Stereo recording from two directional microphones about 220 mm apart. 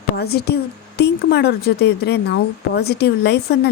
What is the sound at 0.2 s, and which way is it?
Speech, 45° left (ahead or behind).